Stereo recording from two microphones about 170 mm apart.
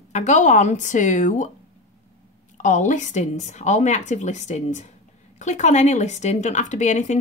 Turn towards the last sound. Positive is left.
turn(degrees=45)  # may be behind; listen again after turning